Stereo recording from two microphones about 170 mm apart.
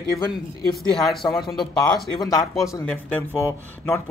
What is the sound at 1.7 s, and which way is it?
Speech, 25° left (ahead or behind).